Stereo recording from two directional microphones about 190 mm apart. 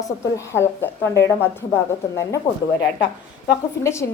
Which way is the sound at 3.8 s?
15° left (ahead or behind).